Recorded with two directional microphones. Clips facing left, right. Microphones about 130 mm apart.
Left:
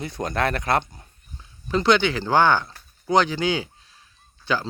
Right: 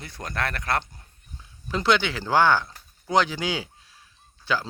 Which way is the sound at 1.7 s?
5° right (ahead or behind).